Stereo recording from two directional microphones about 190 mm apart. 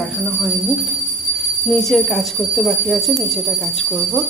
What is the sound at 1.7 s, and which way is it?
Speech, centre (ahead or behind).